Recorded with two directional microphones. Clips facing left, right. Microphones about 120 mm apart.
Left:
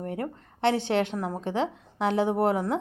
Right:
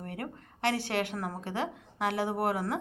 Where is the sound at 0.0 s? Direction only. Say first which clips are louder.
Left 7 dB; 25° left (ahead or behind).